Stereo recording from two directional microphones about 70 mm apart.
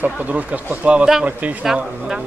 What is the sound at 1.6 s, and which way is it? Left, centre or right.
Speech, centre.